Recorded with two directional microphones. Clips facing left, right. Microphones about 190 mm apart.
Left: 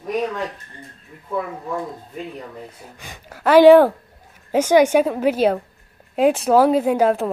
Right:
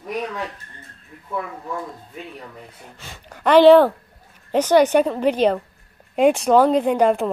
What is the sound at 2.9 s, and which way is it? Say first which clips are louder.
A woman's voice: left 1 dB; 15° left (ahead or behind).